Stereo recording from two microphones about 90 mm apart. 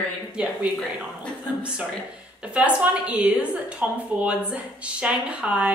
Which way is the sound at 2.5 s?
15° right (ahead or behind).